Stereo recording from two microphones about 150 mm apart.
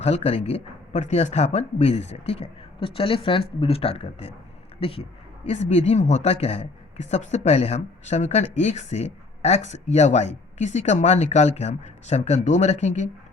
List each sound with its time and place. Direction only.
0.0 s a woman's voice: 45° left (ahead or behind)